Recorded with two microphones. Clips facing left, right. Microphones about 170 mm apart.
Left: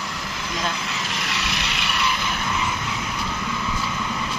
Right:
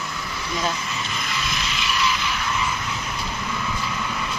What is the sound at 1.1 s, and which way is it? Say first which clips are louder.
Frog: even; 70° left (ahead or behind).